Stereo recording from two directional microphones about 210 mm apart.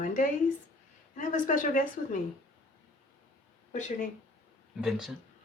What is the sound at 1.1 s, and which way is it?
Speech, 40° left (ahead or behind).